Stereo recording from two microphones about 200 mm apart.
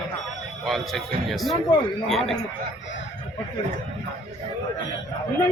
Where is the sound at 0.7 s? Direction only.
Centre (ahead or behind).